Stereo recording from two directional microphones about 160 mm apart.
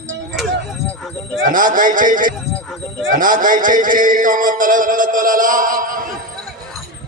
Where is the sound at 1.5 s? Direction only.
60° right (ahead or behind).